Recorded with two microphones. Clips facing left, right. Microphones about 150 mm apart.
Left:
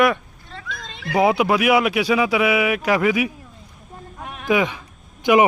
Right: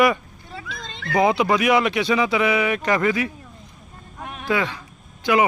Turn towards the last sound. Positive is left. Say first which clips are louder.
# left 4 dB
turn(degrees=15)  # may be behind; listen again after turning